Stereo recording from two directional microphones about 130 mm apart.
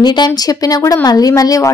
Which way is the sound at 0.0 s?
35° left (ahead or behind).